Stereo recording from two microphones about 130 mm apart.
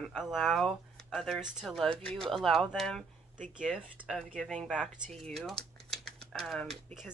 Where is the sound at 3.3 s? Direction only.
80° right.